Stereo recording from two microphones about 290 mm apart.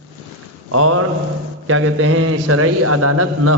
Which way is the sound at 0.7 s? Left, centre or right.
Right.